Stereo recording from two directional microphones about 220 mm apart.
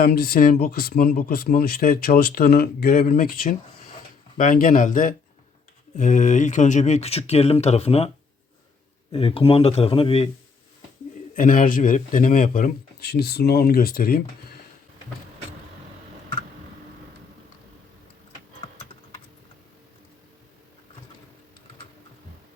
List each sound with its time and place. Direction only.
0.0 s speech: 45° left (ahead or behind); by 8.1 s 30° left (ahead or behind)
9.1 s speech: 25° left (ahead or behind)
11.3 s speech: 40° left (ahead or behind)